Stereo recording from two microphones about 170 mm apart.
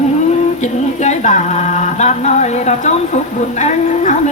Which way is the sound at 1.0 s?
45° left (ahead or behind).